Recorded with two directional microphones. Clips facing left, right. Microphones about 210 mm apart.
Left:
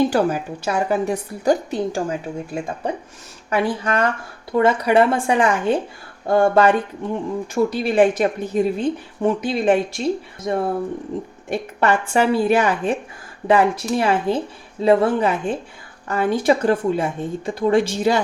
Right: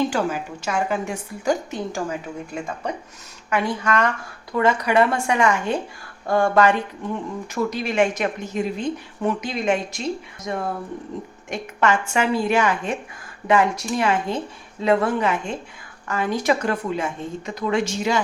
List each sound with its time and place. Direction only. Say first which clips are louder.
0.1 s a woman's voice: left 5 dB; 35° left (ahead or behind)